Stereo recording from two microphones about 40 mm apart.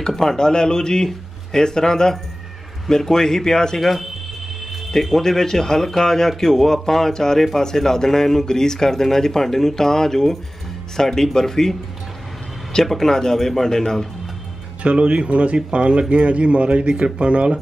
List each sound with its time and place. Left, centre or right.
0.0 s speech: centre
5.2 s speech: centre
12.8 s speech: centre
14.8 s speech: right